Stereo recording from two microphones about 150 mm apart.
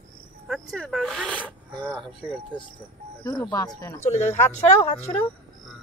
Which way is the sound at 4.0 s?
50° left (ahead or behind).